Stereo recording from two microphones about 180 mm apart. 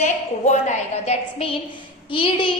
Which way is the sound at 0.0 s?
40° left (ahead or behind).